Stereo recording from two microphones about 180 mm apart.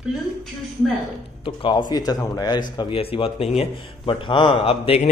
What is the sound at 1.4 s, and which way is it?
Speech, 25° left (ahead or behind).